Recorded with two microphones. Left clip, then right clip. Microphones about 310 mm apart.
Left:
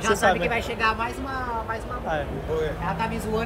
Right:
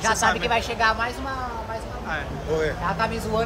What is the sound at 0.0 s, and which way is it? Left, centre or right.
A woman's voice, centre.